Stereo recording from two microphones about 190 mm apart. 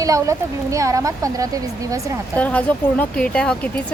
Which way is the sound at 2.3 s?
5° left (ahead or behind).